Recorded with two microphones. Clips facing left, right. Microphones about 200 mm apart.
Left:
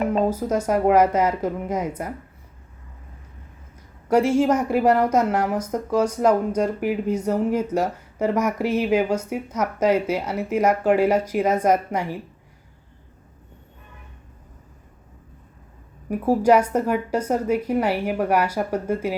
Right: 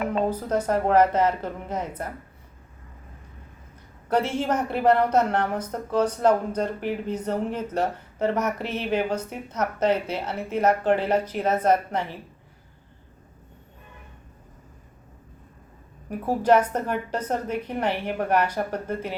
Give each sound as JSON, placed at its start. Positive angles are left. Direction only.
{"t": 0.3, "sound": "a woman's voice", "side_deg": 10}
{"t": 4.1, "sound": "a woman's voice", "side_deg": 10}
{"t": 16.0, "sound": "a woman's voice", "side_deg": 10}